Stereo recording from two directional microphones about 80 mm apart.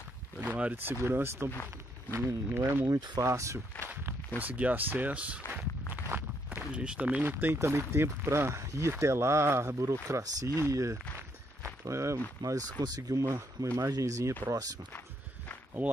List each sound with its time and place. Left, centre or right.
0.4 s speech: centre
1.0 s speech: right
3.2 s speech: right
4.4 s speech: centre
6.0 s walk: right
6.7 s speech: centre; by 12.2 s right
12.4 s speech: right
13.2 s speech: right
15.8 s speech: right